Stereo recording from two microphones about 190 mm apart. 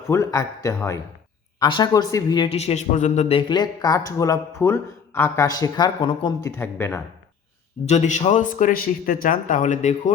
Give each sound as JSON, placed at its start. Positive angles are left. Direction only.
{"t": 0.1, "sound": "a man's voice", "side_deg": 15}
{"t": 6.6, "sound": "a man's voice", "side_deg": 10}
{"t": 7.9, "sound": "speech", "side_deg": 40}